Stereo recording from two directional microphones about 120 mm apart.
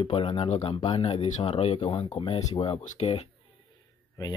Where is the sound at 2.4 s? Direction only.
70° left (ahead or behind).